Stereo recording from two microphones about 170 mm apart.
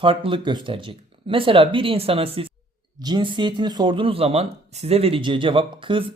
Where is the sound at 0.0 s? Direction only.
30° right (ahead or behind).